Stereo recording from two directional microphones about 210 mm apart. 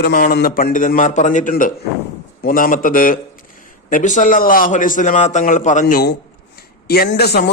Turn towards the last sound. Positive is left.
turn(degrees=50)  # may be behind; listen again after turning